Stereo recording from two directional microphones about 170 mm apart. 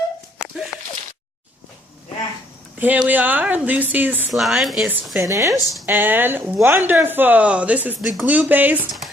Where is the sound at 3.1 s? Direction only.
10° right (ahead or behind).